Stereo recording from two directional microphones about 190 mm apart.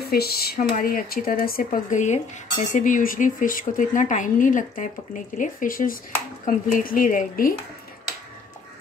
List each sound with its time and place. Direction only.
0.0 s speech: 55° left (ahead or behind)